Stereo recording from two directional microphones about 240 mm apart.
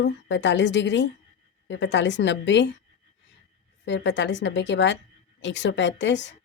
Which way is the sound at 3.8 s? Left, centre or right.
Left.